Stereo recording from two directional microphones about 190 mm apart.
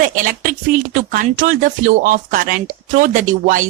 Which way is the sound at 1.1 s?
45° right (ahead or behind).